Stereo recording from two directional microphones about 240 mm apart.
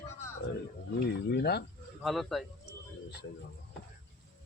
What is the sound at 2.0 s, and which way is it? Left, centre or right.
Speech, centre.